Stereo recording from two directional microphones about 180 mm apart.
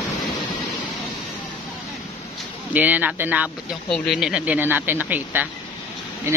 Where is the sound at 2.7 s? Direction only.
10° right (ahead or behind).